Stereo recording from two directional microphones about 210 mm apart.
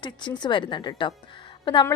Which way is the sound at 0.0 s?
20° left (ahead or behind).